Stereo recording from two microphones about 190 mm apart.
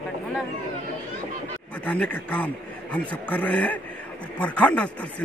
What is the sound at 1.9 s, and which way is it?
A man's voice, 5° left (ahead or behind).